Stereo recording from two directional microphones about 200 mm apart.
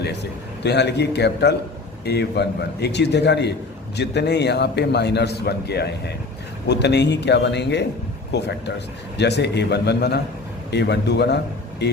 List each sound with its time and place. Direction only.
0.0 s a man's voice: 55° left (ahead or behind)